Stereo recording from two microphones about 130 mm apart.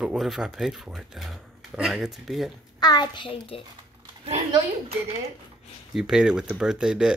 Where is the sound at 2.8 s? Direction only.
35° left (ahead or behind).